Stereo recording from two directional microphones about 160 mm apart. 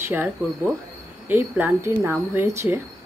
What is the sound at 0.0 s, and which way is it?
A woman's voice, 10° right (ahead or behind).